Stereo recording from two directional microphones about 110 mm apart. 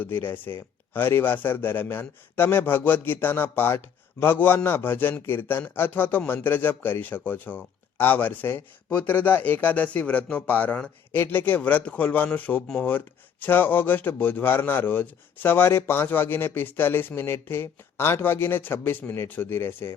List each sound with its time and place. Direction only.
0.0 s speech: 20° left (ahead or behind)